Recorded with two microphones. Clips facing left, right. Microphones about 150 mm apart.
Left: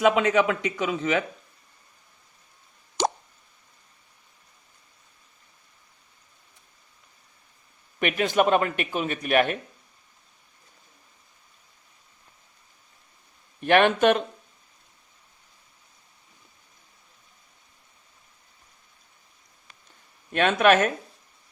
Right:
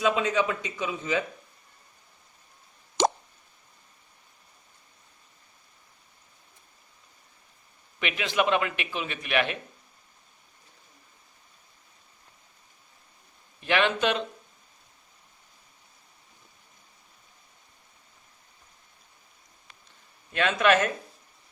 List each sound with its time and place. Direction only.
0.0 s a man's voice: 65° left (ahead or behind)
3.0 s plop: 90° right
7.9 s a man's voice: 50° left (ahead or behind)
13.6 s a man's voice: 55° left (ahead or behind)
20.3 s a man's voice: 50° left (ahead or behind)